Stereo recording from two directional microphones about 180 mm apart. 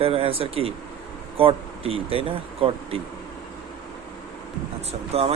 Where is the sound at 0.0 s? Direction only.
30° right (ahead or behind).